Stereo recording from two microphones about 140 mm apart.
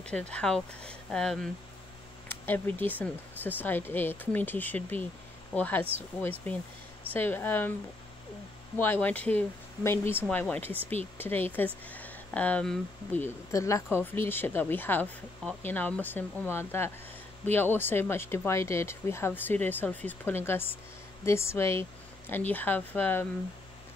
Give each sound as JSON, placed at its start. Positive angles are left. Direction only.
{"t": 0.0, "sound": "speech", "side_deg": 10}
{"t": 8.7, "sound": "speech", "side_deg": 15}